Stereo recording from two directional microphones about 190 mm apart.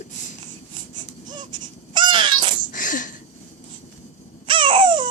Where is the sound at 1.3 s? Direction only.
25° right (ahead or behind).